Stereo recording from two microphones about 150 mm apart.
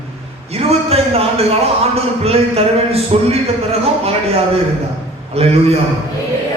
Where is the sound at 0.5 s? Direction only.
40° right (ahead or behind).